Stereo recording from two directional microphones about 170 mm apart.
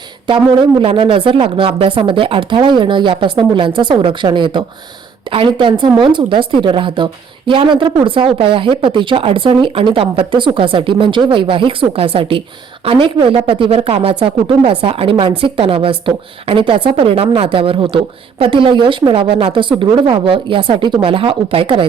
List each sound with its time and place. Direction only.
0.8 s a woman's voice: 30° right (ahead or behind)